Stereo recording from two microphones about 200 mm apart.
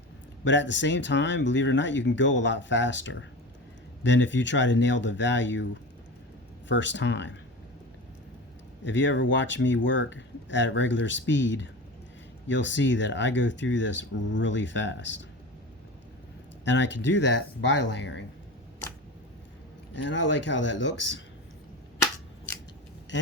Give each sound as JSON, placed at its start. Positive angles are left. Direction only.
{"t": 0.4, "sound": "speech", "side_deg": 65}
{"t": 6.7, "sound": "speech", "side_deg": 65}
{"t": 8.8, "sound": "speech", "side_deg": 65}
{"t": 16.6, "sound": "speech", "side_deg": 65}
{"t": 19.9, "sound": "speech", "side_deg": 65}